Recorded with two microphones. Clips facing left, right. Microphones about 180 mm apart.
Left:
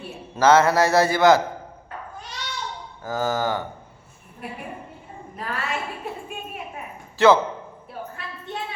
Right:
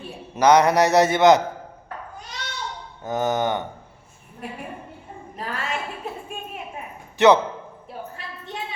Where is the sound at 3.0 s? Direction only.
20° right (ahead or behind).